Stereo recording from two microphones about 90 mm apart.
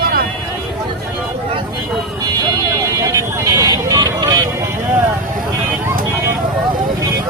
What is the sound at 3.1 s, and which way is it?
Vehicle, 35° right (ahead or behind).